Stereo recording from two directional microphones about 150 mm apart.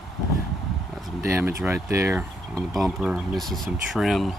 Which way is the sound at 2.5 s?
Centre (ahead or behind).